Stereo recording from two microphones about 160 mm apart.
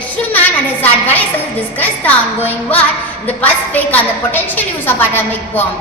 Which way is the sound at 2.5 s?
10° left (ahead or behind).